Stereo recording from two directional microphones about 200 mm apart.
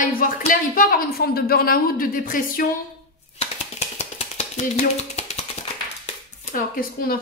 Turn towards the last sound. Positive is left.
turn(degrees=45)  # may be behind; listen again after turning